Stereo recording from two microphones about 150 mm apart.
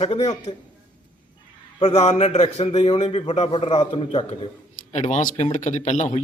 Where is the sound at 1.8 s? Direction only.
45° left (ahead or behind).